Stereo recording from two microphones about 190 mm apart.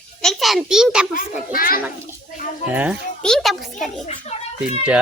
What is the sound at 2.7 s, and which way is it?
Speech, 10° right (ahead or behind).